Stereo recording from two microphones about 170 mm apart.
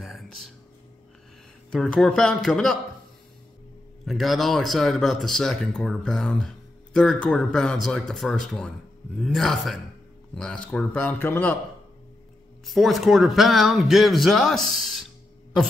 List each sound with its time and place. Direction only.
0.0 s music: centre (ahead or behind)
1.7 s speech: 5° left (ahead or behind)
4.0 s speech: centre (ahead or behind)
12.6 s speech: centre (ahead or behind)